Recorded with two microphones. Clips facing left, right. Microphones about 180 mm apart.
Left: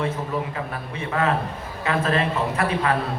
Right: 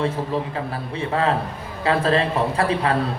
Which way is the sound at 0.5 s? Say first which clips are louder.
Right 3 dB; 30° right (ahead or behind).